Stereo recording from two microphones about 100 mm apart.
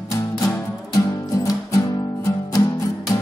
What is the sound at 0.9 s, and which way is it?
Music, 35° left (ahead or behind).